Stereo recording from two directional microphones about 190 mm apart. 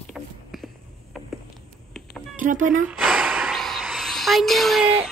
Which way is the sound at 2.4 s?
45° right (ahead or behind).